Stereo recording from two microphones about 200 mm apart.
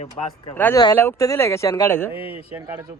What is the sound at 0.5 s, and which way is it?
Speech, 10° left (ahead or behind).